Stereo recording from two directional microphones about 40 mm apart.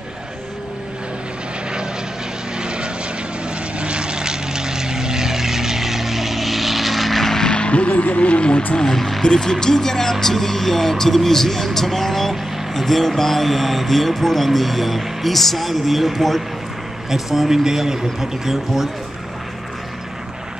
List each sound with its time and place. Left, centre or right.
2.5 s vehicle: right; by 7.4 s centre
7.4 s vehicle: left
8.7 s speech: centre